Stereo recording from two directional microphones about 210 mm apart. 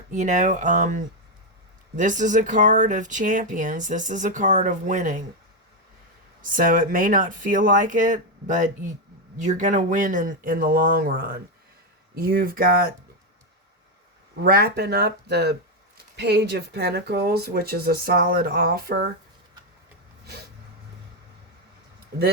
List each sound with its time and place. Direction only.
0.1 s speech: 35° right (ahead or behind)
6.4 s speech: 40° right (ahead or behind)
14.4 s speech: 45° right (ahead or behind)